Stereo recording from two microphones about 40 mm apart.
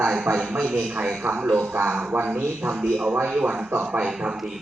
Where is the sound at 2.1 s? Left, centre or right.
Right.